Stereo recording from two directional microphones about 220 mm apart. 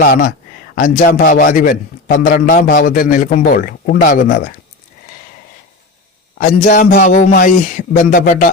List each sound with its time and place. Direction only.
0.0 s a man's voice: 40° left (ahead or behind)
6.4 s a man's voice: 35° left (ahead or behind)